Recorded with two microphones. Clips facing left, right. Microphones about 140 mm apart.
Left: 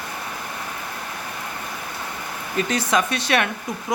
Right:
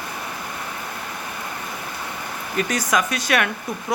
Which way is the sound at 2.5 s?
25° left (ahead or behind).